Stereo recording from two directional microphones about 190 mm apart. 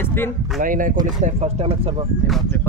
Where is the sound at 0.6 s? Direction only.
45° right (ahead or behind); by 2.1 s 30° right (ahead or behind).